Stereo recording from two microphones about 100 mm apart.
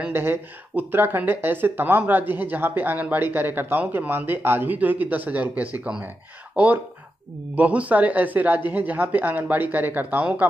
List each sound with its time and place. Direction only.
0.1 s speech: 20° right (ahead or behind)